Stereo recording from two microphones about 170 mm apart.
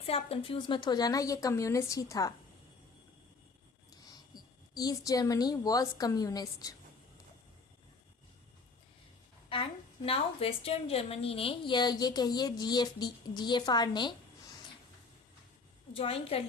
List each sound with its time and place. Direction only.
0.0 s a woman's voice: 35° left (ahead or behind)
4.7 s a woman's voice: 25° left (ahead or behind)
9.5 s a woman's voice: 30° left (ahead or behind)
16.0 s a woman's voice: 35° left (ahead or behind)